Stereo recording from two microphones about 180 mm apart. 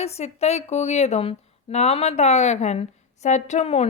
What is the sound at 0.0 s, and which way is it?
A woman's voice, 35° left (ahead or behind).